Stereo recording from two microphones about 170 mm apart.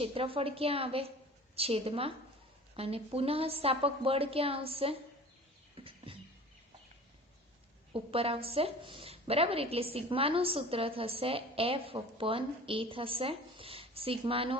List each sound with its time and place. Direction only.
0.0 s a woman's voice: 35° right (ahead or behind)
5.7 s bird: 30° right (ahead or behind)
7.9 s a woman's voice: 35° right (ahead or behind)